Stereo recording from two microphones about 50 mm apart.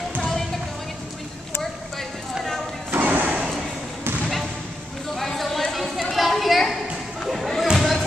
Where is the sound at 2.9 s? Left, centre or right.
Right.